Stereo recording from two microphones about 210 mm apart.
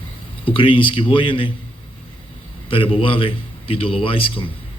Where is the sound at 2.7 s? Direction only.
25° left (ahead or behind).